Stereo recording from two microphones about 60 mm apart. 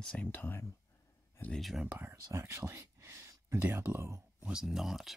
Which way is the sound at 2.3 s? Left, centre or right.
Right.